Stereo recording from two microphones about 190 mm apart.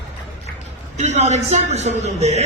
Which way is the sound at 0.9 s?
35° right (ahead or behind).